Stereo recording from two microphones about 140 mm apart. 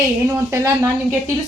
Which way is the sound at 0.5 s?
20° right (ahead or behind).